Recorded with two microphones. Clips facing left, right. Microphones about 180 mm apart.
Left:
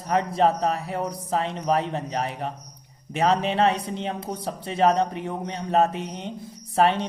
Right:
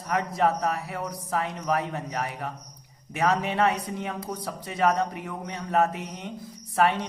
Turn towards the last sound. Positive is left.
turn(degrees=25)  # may be behind; listen again after turning